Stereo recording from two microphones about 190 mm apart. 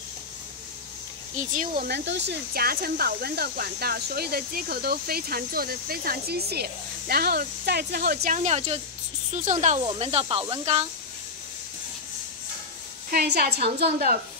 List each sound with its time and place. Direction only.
1.3 s speech: 45° right (ahead or behind)
1.9 s speech: 65° right (ahead or behind); by 10.9 s 30° right (ahead or behind)
13.1 s a woman's voice: 55° right (ahead or behind)